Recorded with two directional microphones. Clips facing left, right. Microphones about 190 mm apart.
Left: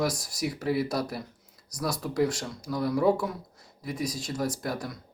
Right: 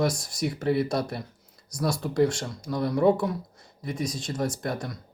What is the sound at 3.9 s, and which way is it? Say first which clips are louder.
Speech: right 1 dB; 25° right (ahead or behind).